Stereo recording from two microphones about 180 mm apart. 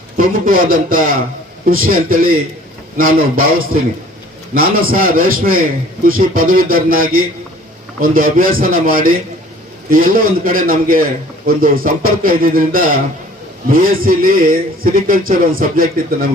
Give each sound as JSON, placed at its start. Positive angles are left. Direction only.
{"t": 0.2, "sound": "a man's voice", "side_deg": -50}